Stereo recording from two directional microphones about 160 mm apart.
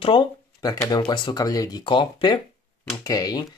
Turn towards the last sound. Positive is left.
turn(degrees=20)  # may be behind; listen again after turning